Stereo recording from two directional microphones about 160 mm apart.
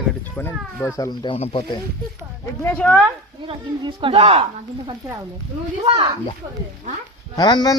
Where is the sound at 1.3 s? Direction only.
35° left (ahead or behind).